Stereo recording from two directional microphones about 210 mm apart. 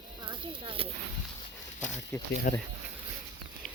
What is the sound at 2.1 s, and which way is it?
Speech, 15° left (ahead or behind).